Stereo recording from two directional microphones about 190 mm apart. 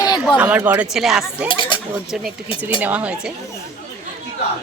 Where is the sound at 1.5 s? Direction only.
25° left (ahead or behind).